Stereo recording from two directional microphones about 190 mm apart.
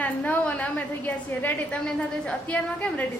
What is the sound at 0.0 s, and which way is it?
A woman's voice, 10° left (ahead or behind).